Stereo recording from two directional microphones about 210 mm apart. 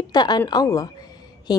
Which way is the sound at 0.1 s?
20° left (ahead or behind).